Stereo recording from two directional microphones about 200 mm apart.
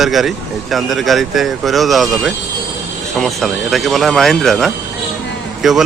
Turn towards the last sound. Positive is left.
turn(degrees=0)  # may be behind; listen again after turning